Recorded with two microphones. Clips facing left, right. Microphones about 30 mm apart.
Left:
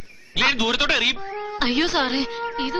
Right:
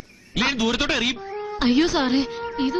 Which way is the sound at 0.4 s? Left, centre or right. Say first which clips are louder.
Left 2 dB; centre.